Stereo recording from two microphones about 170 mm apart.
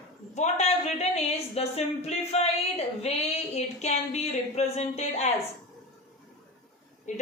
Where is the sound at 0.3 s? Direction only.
40° left (ahead or behind).